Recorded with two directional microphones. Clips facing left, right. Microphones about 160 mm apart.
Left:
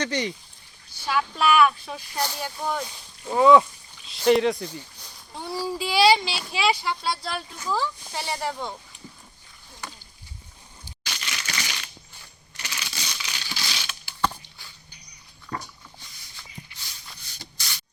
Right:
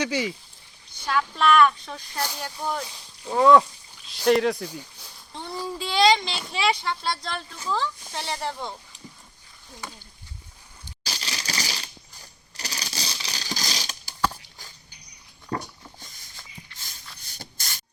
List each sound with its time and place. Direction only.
0.0 s speech: 5° right (ahead or behind)
0.9 s speech: 5° left (ahead or behind)
11.0 s coin: 35° right (ahead or behind)
14.2 s a sound: 5° right (ahead or behind)
15.4 s dog: 30° right (ahead or behind)
16.0 s patter: 45° right (ahead or behind)
16.7 s a sound: 45° right (ahead or behind)